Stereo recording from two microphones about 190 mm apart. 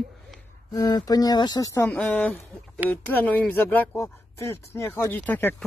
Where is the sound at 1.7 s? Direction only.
10° left (ahead or behind).